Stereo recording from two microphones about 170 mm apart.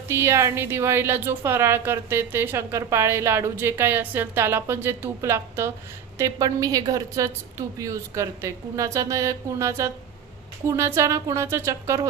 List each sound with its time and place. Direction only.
0.1 s a woman's voice: 15° right (ahead or behind)